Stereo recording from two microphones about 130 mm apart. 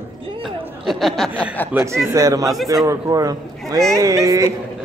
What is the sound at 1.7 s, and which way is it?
Speech, 20° right (ahead or behind).